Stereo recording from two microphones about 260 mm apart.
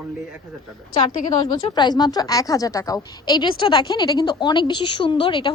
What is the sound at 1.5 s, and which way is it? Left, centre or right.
A woman's voice, centre.